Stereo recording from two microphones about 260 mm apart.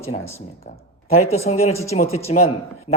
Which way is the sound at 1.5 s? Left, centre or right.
Left.